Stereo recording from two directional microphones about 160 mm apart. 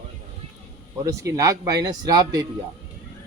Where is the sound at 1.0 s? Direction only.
20° right (ahead or behind).